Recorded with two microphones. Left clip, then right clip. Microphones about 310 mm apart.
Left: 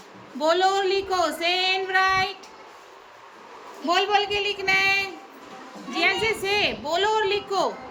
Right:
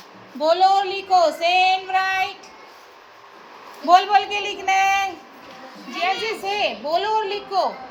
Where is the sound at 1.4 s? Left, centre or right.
Centre.